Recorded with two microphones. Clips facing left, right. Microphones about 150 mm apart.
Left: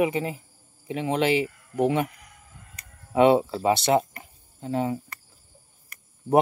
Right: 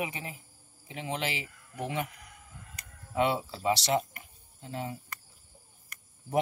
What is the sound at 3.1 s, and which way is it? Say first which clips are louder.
Speech: left 10 dB; 65° left (ahead or behind).